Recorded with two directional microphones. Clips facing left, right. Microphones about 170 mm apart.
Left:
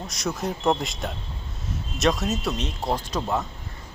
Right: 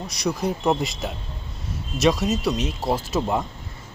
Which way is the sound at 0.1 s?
Centre (ahead or behind).